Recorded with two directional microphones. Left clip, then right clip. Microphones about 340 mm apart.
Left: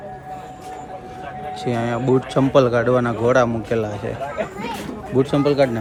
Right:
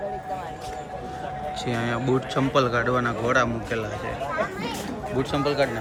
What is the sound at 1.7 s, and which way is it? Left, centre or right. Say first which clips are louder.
Speech: left 6 dB; centre.